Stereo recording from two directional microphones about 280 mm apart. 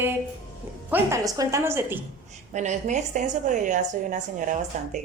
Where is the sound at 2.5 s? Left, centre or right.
Right.